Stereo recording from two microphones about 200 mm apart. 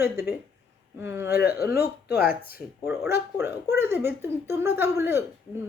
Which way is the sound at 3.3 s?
10° right (ahead or behind).